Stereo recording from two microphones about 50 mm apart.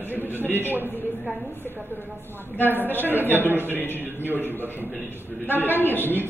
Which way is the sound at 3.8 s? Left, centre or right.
Left.